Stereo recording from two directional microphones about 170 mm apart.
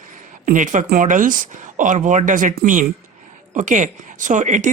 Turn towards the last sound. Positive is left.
turn(degrees=-45)  # may be behind; listen again after turning